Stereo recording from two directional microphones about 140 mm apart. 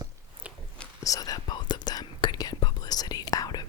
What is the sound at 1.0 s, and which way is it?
Whispering, 25° left (ahead or behind).